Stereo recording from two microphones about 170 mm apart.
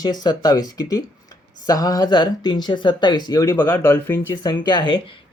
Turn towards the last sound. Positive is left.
turn(degrees=25)  # may be behind; listen again after turning